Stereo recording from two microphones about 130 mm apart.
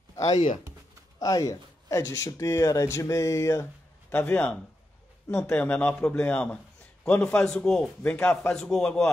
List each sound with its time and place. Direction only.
0.3 s speech: 60° left (ahead or behind)
1.2 s a man's voice: 25° left (ahead or behind); by 9.1 s 5° left (ahead or behind)